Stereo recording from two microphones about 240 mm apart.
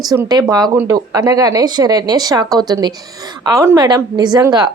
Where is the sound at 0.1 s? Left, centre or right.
Centre.